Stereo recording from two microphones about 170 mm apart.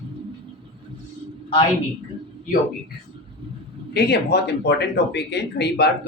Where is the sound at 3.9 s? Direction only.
75° left (ahead or behind); by 5.2 s 90° left.